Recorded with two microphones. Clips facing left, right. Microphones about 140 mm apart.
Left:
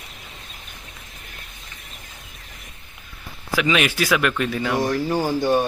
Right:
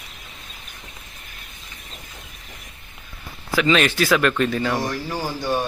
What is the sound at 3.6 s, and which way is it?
Speech, 10° left (ahead or behind).